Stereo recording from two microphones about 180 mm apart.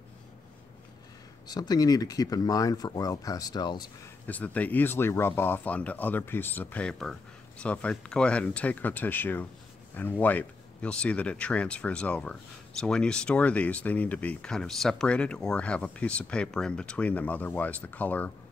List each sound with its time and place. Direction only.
1.5 s speech: 20° left (ahead or behind)
4.3 s speech: 10° left (ahead or behind)